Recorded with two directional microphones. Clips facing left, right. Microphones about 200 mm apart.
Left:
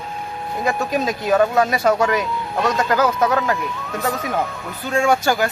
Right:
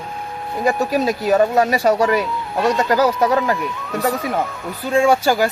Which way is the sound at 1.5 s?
35° right (ahead or behind).